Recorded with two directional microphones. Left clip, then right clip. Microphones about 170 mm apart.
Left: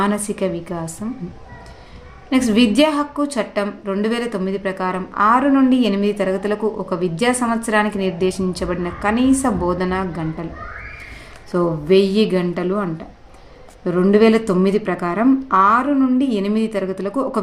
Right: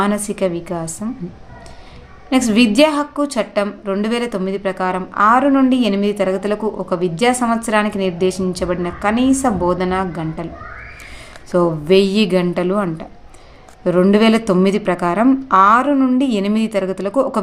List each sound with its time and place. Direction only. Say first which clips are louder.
0.0 s a woman's voice: right 2 dB; 20° right (ahead or behind)
2.3 s a woman's voice: right 2 dB; 25° right (ahead or behind)
11.5 s a woman's voice: right 2 dB; 25° right (ahead or behind)